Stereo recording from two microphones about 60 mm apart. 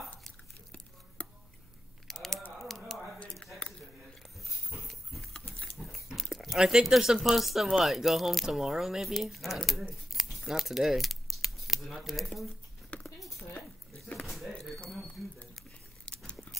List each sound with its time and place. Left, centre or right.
1.2 s tick-tock: centre
2.0 s a sound: centre
4.5 s dog: centre
6.1 s speech: centre
10.3 s keys jangling: centre
13.0 s cutlery: centre
14.2 s a sound: centre